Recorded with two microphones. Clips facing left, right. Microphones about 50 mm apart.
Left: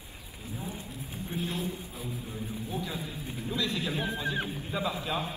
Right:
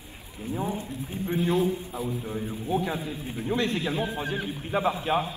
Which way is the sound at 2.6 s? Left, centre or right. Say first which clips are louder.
Right 10 dB; right.